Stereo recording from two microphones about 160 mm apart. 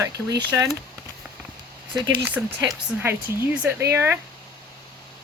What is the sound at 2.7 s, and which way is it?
Speech, 15° right (ahead or behind).